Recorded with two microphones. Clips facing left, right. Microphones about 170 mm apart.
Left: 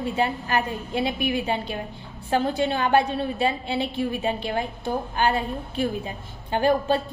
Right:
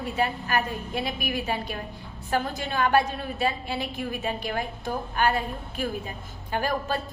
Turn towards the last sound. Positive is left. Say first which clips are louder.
# left 6 dB
turn(degrees=25)  # may be behind; listen again after turning